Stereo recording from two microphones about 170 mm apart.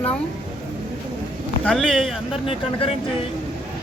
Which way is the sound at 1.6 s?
5° left (ahead or behind).